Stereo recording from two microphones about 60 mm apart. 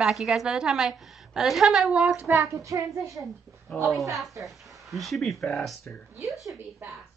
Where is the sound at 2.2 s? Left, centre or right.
Right.